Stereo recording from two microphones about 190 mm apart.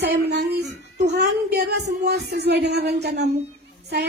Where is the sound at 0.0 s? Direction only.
60° right (ahead or behind).